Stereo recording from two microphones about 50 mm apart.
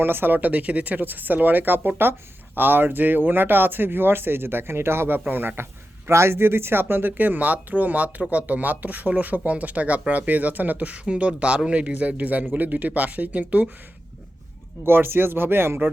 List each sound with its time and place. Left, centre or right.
0.0 s speech: right
6.1 s speech: right
7.2 s a man's voice: right
14.8 s speech: right